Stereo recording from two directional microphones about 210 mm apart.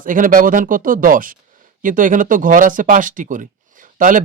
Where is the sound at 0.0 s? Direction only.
40° right (ahead or behind).